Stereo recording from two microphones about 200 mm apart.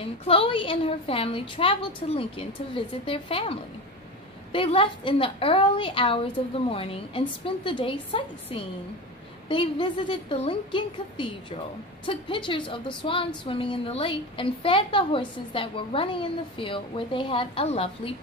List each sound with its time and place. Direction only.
0.0 s a woman's voice: 25° left (ahead or behind)